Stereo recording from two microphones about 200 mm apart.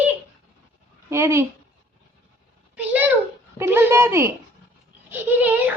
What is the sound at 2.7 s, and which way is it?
A child's voice, 10° right (ahead or behind).